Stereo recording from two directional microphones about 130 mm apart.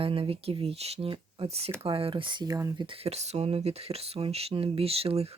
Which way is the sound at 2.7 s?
45° right (ahead or behind).